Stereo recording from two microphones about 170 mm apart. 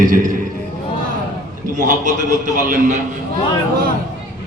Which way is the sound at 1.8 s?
50° right (ahead or behind).